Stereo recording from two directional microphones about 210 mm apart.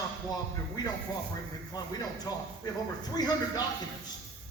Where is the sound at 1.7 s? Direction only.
20° left (ahead or behind).